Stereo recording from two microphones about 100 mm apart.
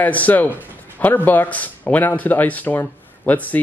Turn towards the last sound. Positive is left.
turn(degrees=15)  # may be behind; listen again after turning